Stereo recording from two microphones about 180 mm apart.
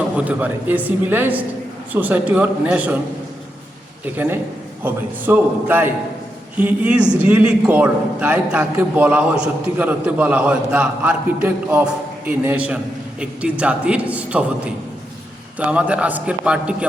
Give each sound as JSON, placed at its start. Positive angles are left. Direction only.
{"t": 0.3, "sound": "a man's voice", "side_deg": -10}
{"t": 4.0, "sound": "a man's voice", "side_deg": -10}